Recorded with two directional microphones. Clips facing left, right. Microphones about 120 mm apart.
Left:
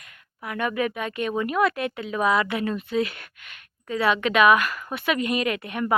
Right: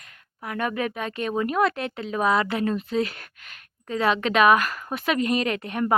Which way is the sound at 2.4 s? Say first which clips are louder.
Right 1 dB; 35° right (ahead or behind).